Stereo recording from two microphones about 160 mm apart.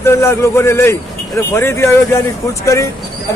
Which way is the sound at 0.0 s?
15° left (ahead or behind).